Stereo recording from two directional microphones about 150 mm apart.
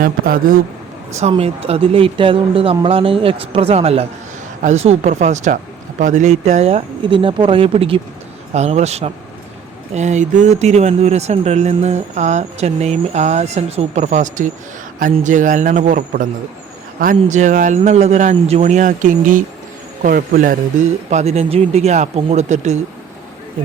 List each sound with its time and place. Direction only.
0.0 s speech: 70° right (ahead or behind)
1.2 s a man's voice: 40° right (ahead or behind)